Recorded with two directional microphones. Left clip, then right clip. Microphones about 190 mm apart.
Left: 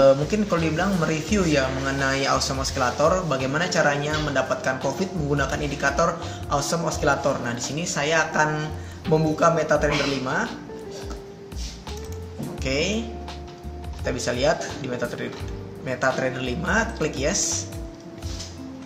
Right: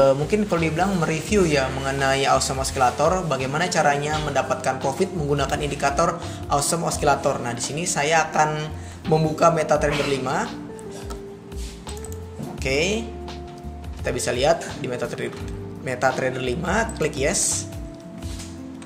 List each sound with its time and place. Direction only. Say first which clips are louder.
0.0 s speech: left 1 dB; 35° right (ahead or behind)
12.6 s speech: right 3 dB; 45° right (ahead or behind)
14.0 s speech: right 2 dB; 45° right (ahead or behind)